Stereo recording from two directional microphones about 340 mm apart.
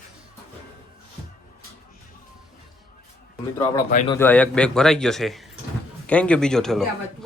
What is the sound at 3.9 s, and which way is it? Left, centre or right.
Speech, left.